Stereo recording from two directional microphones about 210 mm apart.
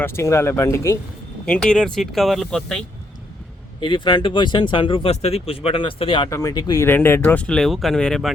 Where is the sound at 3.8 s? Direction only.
20° left (ahead or behind).